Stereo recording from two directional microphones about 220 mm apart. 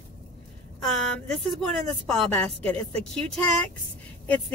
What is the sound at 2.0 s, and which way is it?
A woman's voice, 5° left (ahead or behind).